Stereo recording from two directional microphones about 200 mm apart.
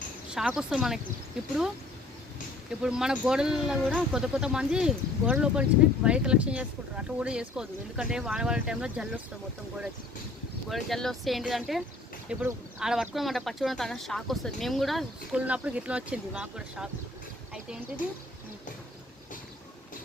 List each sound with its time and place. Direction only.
0.3 s speech: 5° right (ahead or behind)
2.6 s speech: 5° right (ahead or behind)
10.7 s speech: centre (ahead or behind)